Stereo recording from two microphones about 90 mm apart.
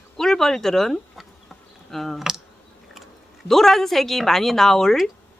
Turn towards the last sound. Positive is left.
turn(degrees=5)  # may be behind; listen again after turning